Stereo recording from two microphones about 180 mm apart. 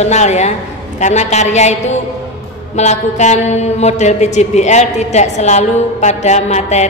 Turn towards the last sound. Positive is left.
turn(degrees=40)  # may be behind; listen again after turning